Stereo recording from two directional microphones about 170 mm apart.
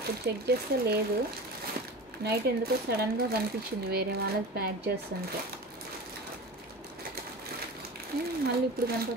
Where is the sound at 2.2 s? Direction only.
65° right (ahead or behind).